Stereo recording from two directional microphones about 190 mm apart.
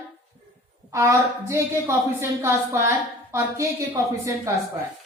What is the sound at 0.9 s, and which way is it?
A woman's voice, 15° right (ahead or behind).